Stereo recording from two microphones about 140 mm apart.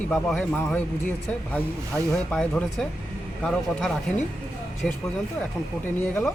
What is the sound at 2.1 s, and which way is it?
Speech, 5° left (ahead or behind).